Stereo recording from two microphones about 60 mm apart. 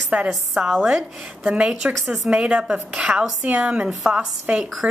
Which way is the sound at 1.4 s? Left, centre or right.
Centre.